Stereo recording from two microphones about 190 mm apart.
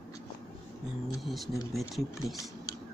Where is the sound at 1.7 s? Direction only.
Centre (ahead or behind).